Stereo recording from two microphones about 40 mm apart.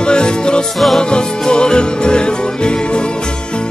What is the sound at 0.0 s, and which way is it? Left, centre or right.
Music, left.